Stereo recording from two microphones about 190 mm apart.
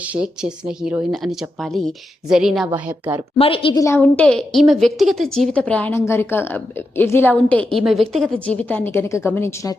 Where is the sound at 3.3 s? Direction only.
30° left (ahead or behind).